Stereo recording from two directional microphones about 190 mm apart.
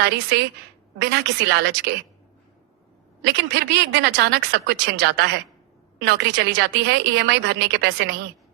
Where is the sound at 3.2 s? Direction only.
60° right (ahead or behind).